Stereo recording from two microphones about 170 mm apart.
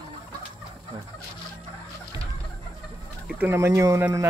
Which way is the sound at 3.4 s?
15° right (ahead or behind).